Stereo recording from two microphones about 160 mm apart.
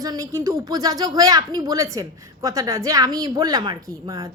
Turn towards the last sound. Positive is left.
turn(degrees=-20)  # may be behind; listen again after turning